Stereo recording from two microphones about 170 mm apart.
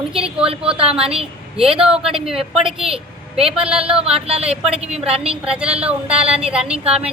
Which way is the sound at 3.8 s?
35° right (ahead or behind).